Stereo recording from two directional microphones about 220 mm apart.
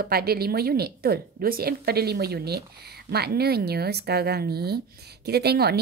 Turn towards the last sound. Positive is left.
turn(degrees=-45)  # may be behind; listen again after turning